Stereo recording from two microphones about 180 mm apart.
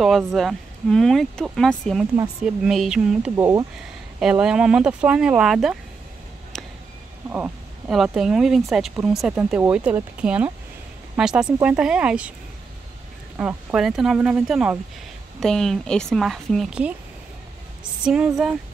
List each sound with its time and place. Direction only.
0.0 s speech: centre (ahead or behind)
3.3 s speech: 15° right (ahead or behind)
7.2 s speech: 10° right (ahead or behind)
13.4 s speech: 10° right (ahead or behind)
18.0 s speech: 5° right (ahead or behind)